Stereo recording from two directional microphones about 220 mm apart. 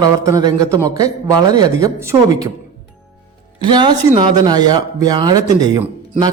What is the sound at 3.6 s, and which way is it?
Speech, 20° right (ahead or behind).